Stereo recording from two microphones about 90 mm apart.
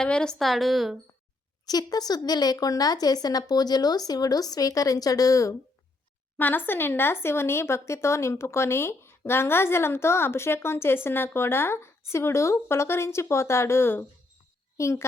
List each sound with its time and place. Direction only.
0.0 s a woman's voice: 10° left (ahead or behind)
1.6 s speech: 45° left (ahead or behind)
6.3 s a child's voice: 20° left (ahead or behind)